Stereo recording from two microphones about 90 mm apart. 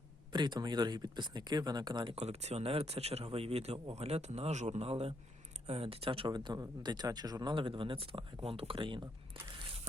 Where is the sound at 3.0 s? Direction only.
90° right.